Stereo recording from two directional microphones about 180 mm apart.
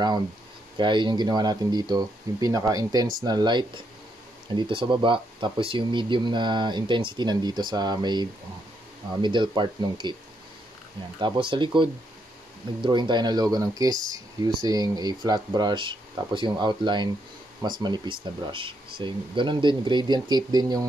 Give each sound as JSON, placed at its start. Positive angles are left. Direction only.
{"t": 0.7, "sound": "speech", "side_deg": -25}
{"t": 11.1, "sound": "speech", "side_deg": -25}